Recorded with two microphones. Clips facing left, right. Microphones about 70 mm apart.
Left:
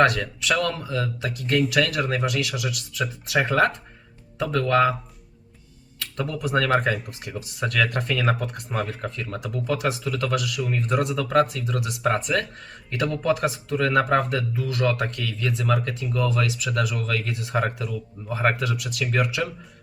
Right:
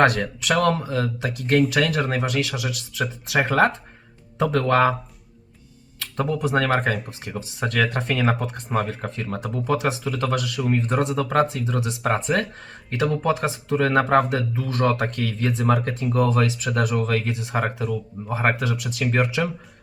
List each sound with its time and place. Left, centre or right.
0.0 s speech: right
6.1 s speech: right